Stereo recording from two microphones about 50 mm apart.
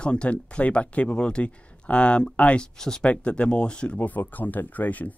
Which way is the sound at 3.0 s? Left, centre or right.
Left.